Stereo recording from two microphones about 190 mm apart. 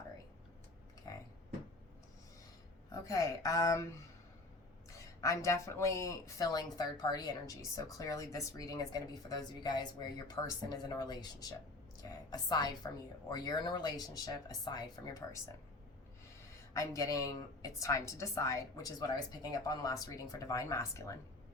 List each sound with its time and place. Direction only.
1.1 s a sound: 20° left (ahead or behind)
2.9 s a woman's voice: 15° left (ahead or behind)
4.9 s speech: 15° left (ahead or behind)
16.5 s a woman's voice: 15° left (ahead or behind)